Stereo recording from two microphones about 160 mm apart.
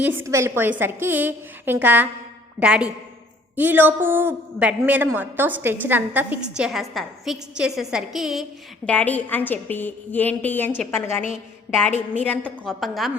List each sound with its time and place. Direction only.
0.0 s a woman's voice: 15° right (ahead or behind)
6.7 s a woman's voice: centre (ahead or behind)
8.9 s a woman's voice: 10° left (ahead or behind)